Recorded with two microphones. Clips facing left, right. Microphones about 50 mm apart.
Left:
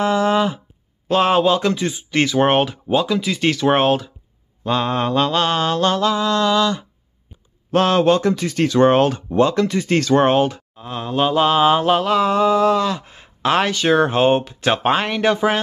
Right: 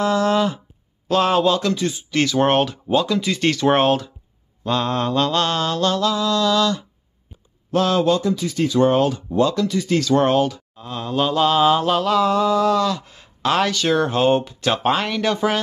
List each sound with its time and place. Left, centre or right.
0.0 s a sound: centre
1.0 s speech: left; by 4.1 s centre
4.6 s mantra: centre
7.7 s speech: left
8.3 s speech: left
10.8 s mantra: left